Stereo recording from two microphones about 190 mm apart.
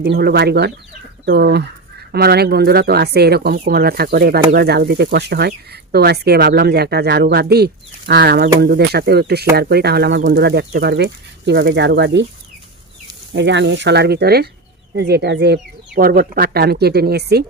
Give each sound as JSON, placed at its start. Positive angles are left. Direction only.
{"t": 0.0, "sound": "speech", "side_deg": -55}
{"t": 13.3, "sound": "speech", "side_deg": -65}